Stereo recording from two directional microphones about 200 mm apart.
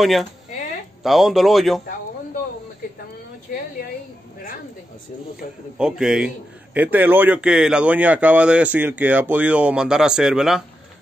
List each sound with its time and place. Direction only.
0.0 s speech: centre (ahead or behind)
3.5 s a woman's voice: 45° left (ahead or behind)
5.8 s a man's voice: 5° right (ahead or behind)